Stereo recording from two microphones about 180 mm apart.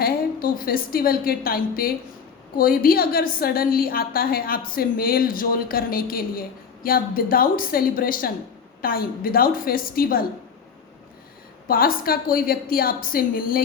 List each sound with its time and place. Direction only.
0.0 s a woman's voice: 55° left (ahead or behind)
11.7 s a woman's voice: 55° left (ahead or behind)